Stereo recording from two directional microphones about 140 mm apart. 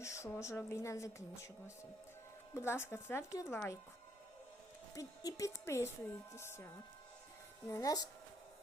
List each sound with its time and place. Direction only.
0.0 s a woman's voice: 20° left (ahead or behind)
4.9 s a woman's voice: 25° left (ahead or behind)
7.7 s a woman's voice: 25° left (ahead or behind)